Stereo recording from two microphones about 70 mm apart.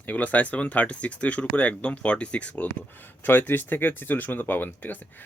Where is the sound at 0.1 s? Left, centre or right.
Left.